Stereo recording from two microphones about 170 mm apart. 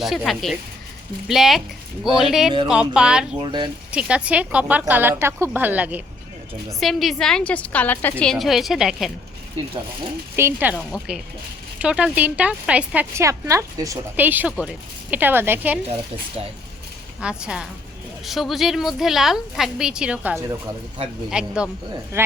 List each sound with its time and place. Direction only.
0.0 s a woman's voice: centre (ahead or behind)
3.4 s speech: 25° right (ahead or behind)
3.9 s a woman's voice: 5° right (ahead or behind)
10.3 s a woman's voice: 10° right (ahead or behind)
17.2 s a woman's voice: 5° right (ahead or behind)